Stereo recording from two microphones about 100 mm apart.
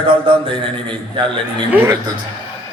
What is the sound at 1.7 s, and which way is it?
Speech, 20° right (ahead or behind).